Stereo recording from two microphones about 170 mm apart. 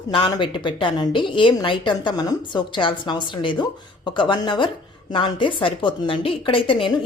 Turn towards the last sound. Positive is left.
turn(degrees=30)  # may be behind; listen again after turning